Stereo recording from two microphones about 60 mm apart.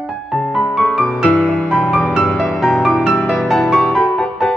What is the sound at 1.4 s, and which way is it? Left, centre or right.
Music, centre.